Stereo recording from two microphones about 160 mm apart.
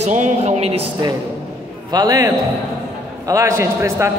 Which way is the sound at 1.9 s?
25° right (ahead or behind).